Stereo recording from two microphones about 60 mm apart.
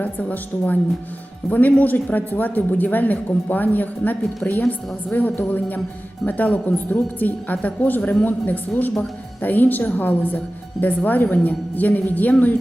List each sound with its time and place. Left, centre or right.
0.0 s a woman's voice: left